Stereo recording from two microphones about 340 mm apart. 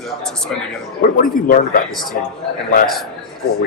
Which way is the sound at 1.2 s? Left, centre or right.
Left.